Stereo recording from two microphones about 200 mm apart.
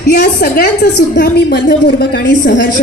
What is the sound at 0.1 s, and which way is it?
A woman's voice, 55° left (ahead or behind).